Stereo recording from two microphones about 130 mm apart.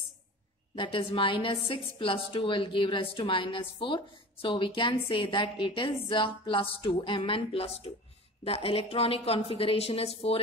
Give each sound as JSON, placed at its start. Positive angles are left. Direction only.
{"t": 0.7, "sound": "a woman's voice", "side_deg": 45}